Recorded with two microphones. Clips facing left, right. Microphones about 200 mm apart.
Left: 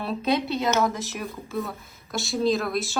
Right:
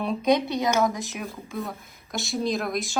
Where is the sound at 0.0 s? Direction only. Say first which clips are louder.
Right 3 dB; 15° right (ahead or behind).